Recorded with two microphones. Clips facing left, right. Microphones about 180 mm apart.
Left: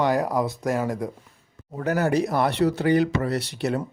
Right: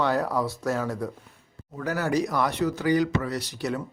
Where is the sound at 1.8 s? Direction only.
55° left (ahead or behind).